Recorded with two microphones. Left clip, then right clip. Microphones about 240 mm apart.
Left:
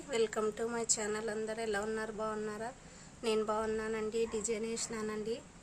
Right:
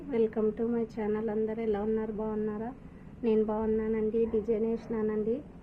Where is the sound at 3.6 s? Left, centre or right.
Centre.